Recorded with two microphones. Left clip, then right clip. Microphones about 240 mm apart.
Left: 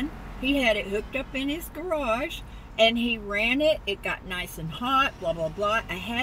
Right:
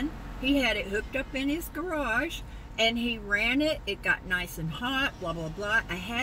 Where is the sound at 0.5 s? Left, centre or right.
Centre.